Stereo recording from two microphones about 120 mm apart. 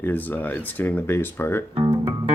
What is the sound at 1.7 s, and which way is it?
Music, 40° right (ahead or behind).